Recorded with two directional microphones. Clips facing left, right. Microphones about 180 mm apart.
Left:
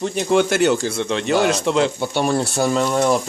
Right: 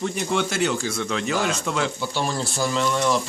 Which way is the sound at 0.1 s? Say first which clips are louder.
Left 7 dB; 40° left (ahead or behind).